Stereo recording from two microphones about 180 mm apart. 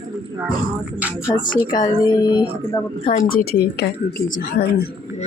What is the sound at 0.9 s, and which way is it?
Music, 10° right (ahead or behind).